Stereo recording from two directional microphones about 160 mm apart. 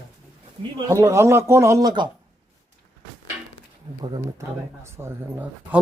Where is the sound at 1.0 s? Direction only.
15° right (ahead or behind).